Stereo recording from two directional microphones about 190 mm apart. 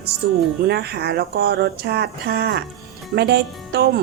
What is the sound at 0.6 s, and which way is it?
Speech, 60° right (ahead or behind).